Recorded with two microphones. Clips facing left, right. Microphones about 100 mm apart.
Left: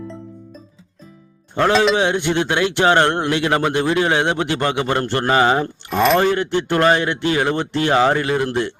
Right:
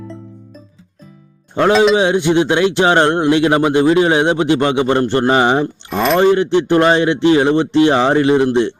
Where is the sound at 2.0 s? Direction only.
20° right (ahead or behind).